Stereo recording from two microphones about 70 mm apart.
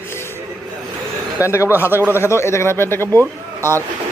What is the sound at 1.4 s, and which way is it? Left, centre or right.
Speech, left.